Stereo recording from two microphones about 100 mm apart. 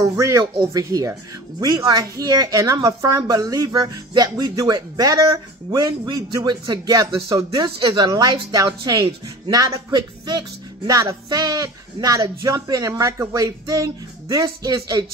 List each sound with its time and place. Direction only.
0.0 s a woman's voice: 30° right (ahead or behind)